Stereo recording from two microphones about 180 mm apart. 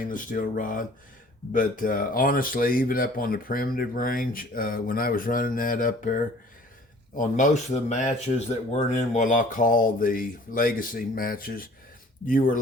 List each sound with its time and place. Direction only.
0.0 s speech: 50° left (ahead or behind)
7.2 s speech: 45° left (ahead or behind)